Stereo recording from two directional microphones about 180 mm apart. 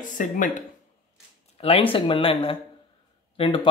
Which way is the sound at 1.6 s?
30° left (ahead or behind).